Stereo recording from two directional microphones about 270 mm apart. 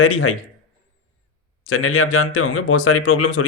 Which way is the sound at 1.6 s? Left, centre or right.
Left.